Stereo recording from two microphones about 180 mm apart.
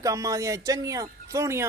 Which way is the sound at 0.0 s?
20° right (ahead or behind).